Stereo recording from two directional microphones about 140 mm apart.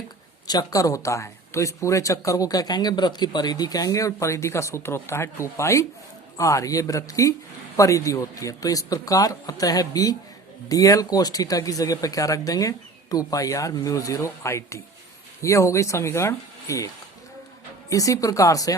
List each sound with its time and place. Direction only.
0.4 s speech: 25° left (ahead or behind)